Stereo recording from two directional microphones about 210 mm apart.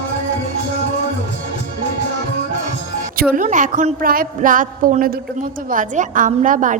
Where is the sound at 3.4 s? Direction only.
35° right (ahead or behind).